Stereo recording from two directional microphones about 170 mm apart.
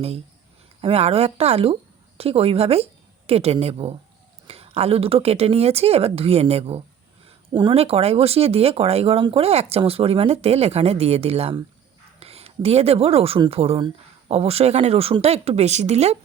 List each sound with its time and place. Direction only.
0.8 s speech: 35° right (ahead or behind)